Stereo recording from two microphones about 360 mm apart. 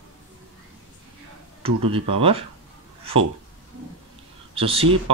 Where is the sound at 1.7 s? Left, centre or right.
Right.